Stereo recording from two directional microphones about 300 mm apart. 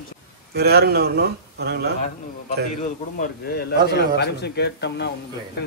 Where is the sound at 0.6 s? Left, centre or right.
Right.